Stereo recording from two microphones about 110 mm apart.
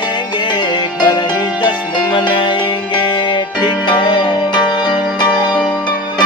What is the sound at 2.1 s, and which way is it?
Music, 45° left (ahead or behind).